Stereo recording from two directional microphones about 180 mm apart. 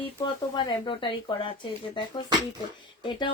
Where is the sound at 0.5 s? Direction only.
25° left (ahead or behind).